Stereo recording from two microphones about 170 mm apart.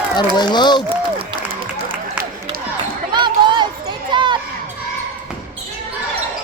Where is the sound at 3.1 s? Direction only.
25° right (ahead or behind).